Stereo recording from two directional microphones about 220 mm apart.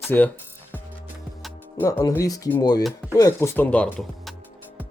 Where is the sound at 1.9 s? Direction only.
15° left (ahead or behind).